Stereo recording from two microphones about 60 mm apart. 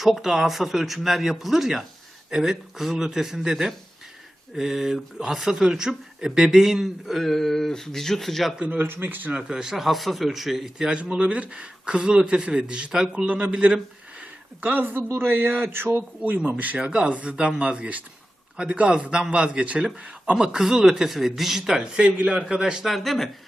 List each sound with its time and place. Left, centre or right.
0.0 s speech: centre
8.5 s speech: right
8.8 s speech: right
9.3 s speech: centre
10.8 s a man's voice: centre; by 16.0 s right
16.0 s a man's voice: right; by 21.8 s centre
21.9 s a man's voice: right
22.9 s speech: centre